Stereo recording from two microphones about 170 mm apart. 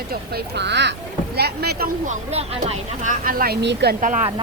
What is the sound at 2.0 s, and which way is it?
Speech, 45° right (ahead or behind).